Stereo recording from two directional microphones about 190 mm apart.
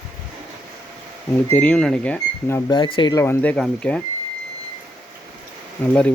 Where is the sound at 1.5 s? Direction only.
10° left (ahead or behind).